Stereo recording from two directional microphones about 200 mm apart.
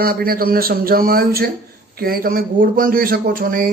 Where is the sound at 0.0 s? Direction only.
45° right (ahead or behind).